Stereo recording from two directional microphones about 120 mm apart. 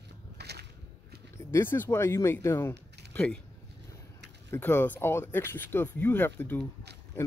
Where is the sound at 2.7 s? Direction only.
10° left (ahead or behind).